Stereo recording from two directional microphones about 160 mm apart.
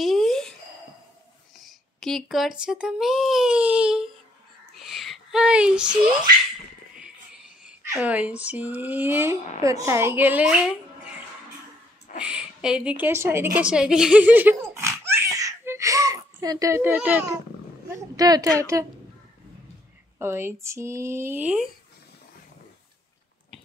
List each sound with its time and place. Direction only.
0.0 s a sound: centre (ahead or behind)
1.6 s a child's voice: centre (ahead or behind)
4.8 s child singing: centre (ahead or behind)
7.9 s speech: 10° right (ahead or behind)
12.2 s a sound: 5° right (ahead or behind)
17.9 s a woman's voice: 25° right (ahead or behind)
20.2 s speech: 15° right (ahead or behind)